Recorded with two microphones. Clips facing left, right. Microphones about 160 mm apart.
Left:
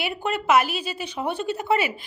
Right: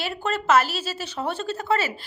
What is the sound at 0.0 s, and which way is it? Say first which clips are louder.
A woman's voice: even; 15° left (ahead or behind).